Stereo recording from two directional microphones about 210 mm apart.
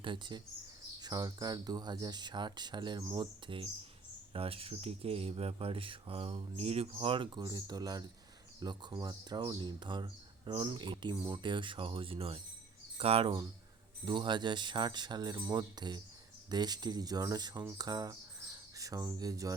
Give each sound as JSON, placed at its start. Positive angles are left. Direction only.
{"t": 0.0, "sound": "speech", "side_deg": -20}